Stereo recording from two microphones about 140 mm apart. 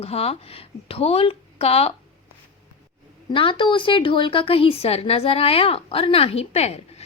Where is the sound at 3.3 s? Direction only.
35° left (ahead or behind).